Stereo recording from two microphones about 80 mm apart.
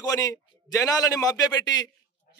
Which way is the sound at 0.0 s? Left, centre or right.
Left.